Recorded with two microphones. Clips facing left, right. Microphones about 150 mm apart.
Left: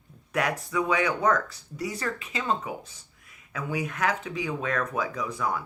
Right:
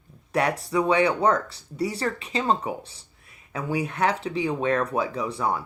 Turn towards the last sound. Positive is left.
turn(degrees=-30)  # may be behind; listen again after turning